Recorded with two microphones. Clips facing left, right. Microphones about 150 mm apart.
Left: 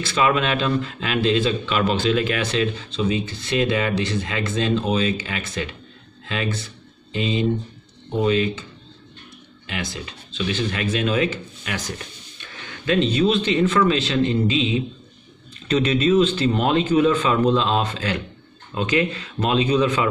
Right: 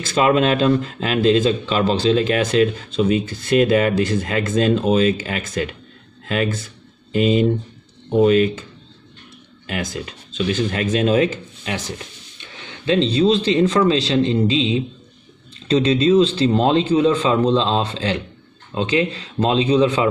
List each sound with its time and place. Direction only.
0.0 s speech: 40° right (ahead or behind)
9.7 s speech: 45° right (ahead or behind)
12.4 s speech: 20° right (ahead or behind)